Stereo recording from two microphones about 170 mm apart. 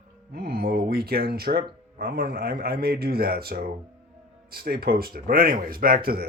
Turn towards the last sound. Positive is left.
turn(degrees=-60)  # may be behind; listen again after turning